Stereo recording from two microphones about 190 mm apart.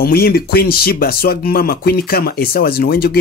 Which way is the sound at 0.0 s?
55° left (ahead or behind).